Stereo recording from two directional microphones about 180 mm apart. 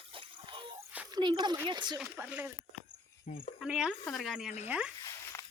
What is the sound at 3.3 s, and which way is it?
Speech, 45° left (ahead or behind).